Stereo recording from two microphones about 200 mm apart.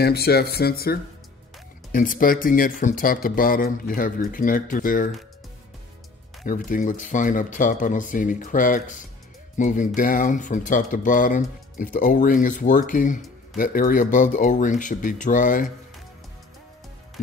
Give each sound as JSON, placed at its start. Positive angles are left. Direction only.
{"t": 0.0, "sound": "speech", "side_deg": 50}
{"t": 6.4, "sound": "speech", "side_deg": 45}